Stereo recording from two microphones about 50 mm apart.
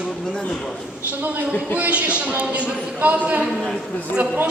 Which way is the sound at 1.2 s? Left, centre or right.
Right.